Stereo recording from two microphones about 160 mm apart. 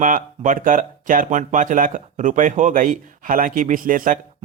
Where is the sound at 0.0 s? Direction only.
55° right (ahead or behind).